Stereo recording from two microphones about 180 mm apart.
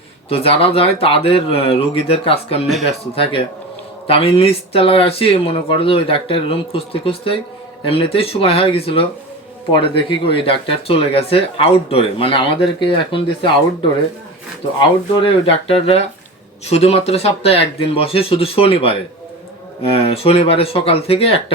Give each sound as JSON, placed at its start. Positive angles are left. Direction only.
{"t": 0.3, "sound": "speech", "side_deg": 30}
{"t": 14.8, "sound": "speech", "side_deg": 25}